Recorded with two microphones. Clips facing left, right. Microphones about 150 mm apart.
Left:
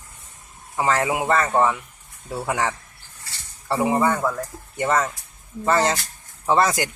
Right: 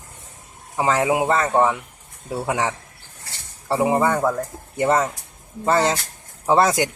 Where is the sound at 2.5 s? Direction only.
10° right (ahead or behind).